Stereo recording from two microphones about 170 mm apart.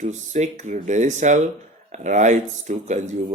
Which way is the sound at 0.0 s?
45° right (ahead or behind).